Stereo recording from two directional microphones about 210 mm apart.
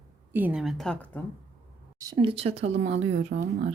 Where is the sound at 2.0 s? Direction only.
20° right (ahead or behind).